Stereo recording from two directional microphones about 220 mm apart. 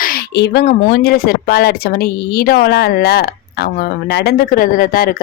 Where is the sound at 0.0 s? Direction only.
45° left (ahead or behind).